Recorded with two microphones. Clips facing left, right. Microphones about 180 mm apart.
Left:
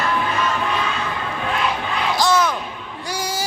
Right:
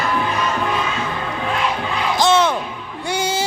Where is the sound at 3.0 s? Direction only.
25° right (ahead or behind).